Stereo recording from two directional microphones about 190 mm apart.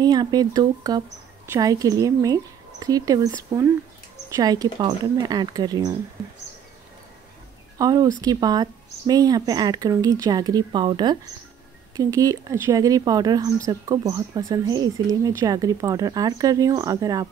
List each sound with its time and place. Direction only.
0.0 s speech: 20° right (ahead or behind)
7.8 s speech: 20° right (ahead or behind)